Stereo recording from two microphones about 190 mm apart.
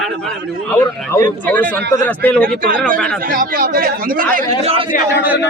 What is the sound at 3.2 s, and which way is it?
A man's voice, 50° right (ahead or behind).